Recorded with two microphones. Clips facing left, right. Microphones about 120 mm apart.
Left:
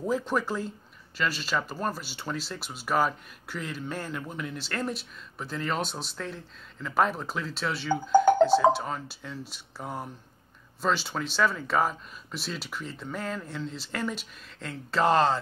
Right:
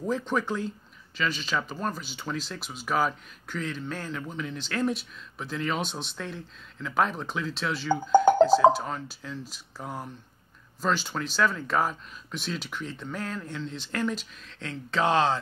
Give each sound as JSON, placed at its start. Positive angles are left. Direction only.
{"t": 0.0, "sound": "speech", "side_deg": 5}